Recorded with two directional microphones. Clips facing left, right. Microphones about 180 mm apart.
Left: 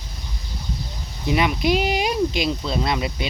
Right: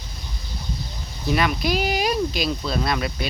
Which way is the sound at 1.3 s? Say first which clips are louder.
Left 2 dB; 20° left (ahead or behind).